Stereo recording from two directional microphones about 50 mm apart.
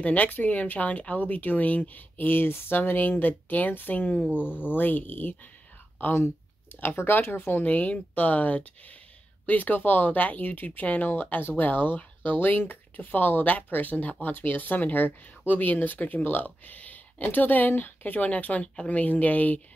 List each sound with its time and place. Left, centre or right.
0.0 s speech: left
7.6 s speech: left